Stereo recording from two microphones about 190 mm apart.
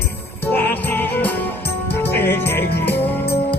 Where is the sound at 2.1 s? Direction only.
10° left (ahead or behind).